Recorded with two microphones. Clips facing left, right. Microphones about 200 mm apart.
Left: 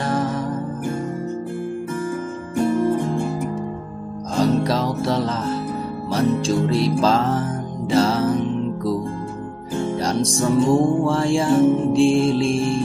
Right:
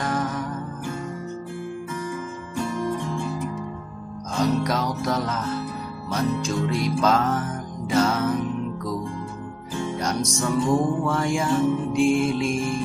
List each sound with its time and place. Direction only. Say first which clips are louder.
0.0 s music: left 4 dB; 30° left (ahead or behind)
2.7 s music: left 7 dB; 50° left (ahead or behind)
4.4 s music: left 4 dB; 30° left (ahead or behind)
9.9 s music: left 4 dB; 30° left (ahead or behind)